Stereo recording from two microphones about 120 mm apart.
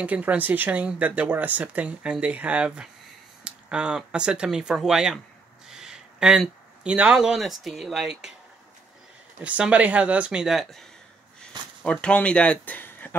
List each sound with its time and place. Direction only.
0.0 s speech: 10° right (ahead or behind)
9.4 s speech: 10° right (ahead or behind); by 13.1 s 15° left (ahead or behind)